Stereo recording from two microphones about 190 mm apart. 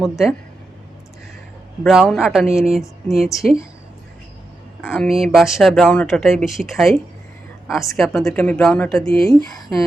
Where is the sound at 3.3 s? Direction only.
15° left (ahead or behind).